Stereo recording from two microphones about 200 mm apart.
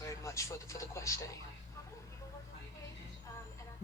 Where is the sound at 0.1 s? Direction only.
15° left (ahead or behind).